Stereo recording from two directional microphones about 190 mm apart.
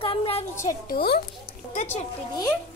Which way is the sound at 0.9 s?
55° left (ahead or behind).